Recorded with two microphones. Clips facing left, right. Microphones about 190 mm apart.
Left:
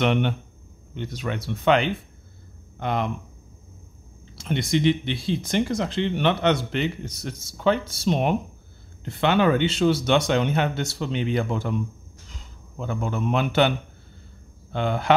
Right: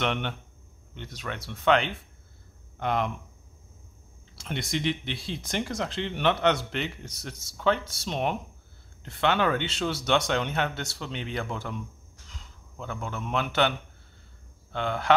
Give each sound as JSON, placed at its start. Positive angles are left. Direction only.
{"t": 0.0, "sound": "speech", "side_deg": 5}
{"t": 4.4, "sound": "a man's voice", "side_deg": 0}